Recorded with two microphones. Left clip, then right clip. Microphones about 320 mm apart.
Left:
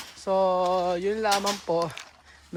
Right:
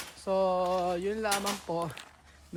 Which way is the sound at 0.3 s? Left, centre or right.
Centre.